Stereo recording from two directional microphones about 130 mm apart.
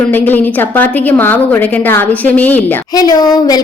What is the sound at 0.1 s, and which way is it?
A woman's voice, 15° left (ahead or behind).